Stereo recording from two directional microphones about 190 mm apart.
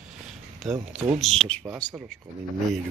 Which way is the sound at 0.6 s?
5° right (ahead or behind).